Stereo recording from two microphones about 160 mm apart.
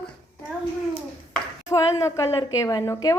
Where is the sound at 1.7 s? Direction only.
20° left (ahead or behind).